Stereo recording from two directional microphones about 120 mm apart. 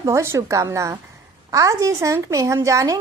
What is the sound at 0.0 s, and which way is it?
A woman's voice, 25° right (ahead or behind).